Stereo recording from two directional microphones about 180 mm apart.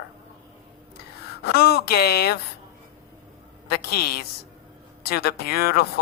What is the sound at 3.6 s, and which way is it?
Speech, 60° left (ahead or behind).